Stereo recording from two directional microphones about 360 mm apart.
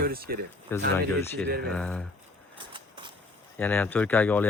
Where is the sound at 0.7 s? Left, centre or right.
Centre.